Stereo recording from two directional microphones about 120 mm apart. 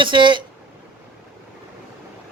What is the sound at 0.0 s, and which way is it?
Speech, 40° right (ahead or behind).